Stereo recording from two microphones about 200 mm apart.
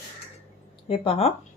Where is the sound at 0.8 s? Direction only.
30° left (ahead or behind).